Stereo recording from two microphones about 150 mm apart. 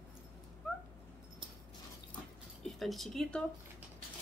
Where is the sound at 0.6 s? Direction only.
5° left (ahead or behind).